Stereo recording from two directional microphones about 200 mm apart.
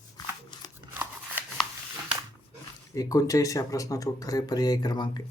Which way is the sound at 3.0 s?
15° left (ahead or behind).